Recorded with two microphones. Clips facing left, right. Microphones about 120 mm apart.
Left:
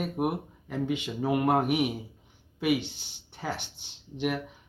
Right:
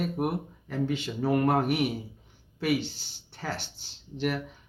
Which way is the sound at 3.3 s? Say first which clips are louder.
Left 1 dB; 10° left (ahead or behind).